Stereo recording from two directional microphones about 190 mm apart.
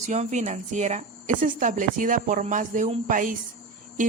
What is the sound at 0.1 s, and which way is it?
A woman's voice, 40° right (ahead or behind).